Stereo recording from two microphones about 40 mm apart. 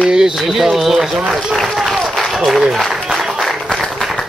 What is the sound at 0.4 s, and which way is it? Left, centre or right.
Speech, centre.